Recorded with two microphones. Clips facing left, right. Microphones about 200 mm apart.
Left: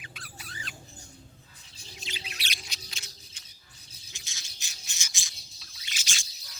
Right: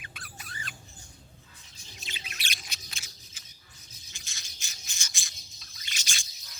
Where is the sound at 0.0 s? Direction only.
50° right (ahead or behind).